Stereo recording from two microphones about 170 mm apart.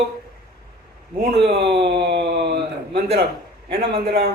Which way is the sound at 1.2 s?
70° right (ahead or behind).